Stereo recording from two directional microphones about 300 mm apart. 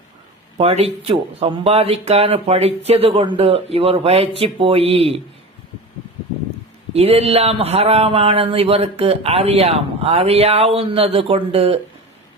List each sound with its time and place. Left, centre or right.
0.5 s speech: right
6.9 s speech: right